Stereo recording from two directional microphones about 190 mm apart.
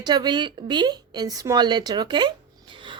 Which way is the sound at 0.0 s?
20° right (ahead or behind).